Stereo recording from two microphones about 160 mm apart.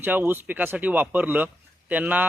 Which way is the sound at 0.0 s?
10° right (ahead or behind).